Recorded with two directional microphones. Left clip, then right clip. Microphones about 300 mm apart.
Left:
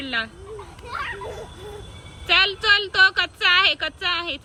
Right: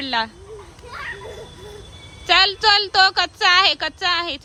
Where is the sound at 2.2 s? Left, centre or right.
Centre.